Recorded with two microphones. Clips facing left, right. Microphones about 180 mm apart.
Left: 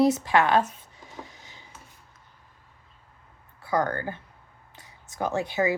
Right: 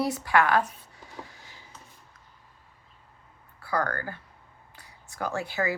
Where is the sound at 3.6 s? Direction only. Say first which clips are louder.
Left 3 dB; 20° left (ahead or behind).